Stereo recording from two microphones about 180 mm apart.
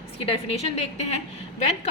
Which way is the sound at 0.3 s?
35° left (ahead or behind).